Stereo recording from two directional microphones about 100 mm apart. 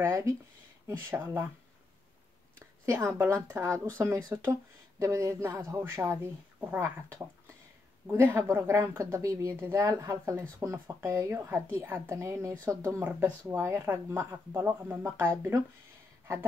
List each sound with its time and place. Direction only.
0.0 s speech: 30° right (ahead or behind)
2.8 s speech: 30° right (ahead or behind)
13.0 s speech: 15° right (ahead or behind)